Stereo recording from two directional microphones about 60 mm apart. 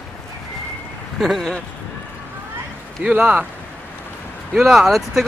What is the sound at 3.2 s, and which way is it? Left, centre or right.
Speech, centre.